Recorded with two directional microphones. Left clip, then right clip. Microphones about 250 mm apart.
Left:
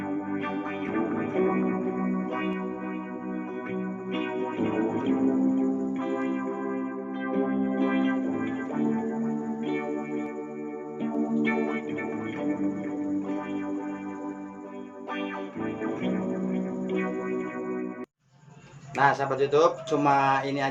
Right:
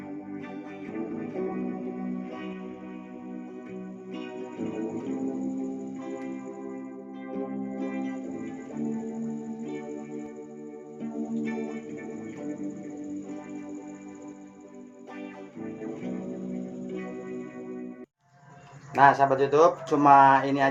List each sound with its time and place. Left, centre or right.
0.9 s music: left
4.1 s music: left
15.2 s music: left
18.9 s speech: centre